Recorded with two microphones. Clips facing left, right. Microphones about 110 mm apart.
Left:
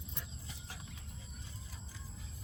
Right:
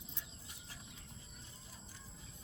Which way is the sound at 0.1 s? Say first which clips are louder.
Left 5 dB; 80° left.